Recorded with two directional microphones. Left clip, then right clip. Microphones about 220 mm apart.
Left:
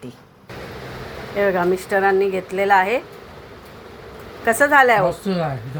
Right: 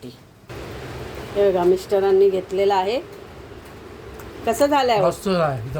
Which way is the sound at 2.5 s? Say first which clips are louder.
Left 3 dB; 5° left (ahead or behind).